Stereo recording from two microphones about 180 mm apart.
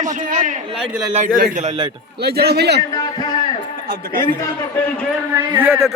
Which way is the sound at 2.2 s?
60° right (ahead or behind).